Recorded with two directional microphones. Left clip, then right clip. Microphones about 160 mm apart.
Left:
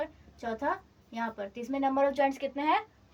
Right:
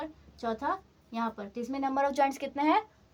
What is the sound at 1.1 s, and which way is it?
Speech, 20° right (ahead or behind).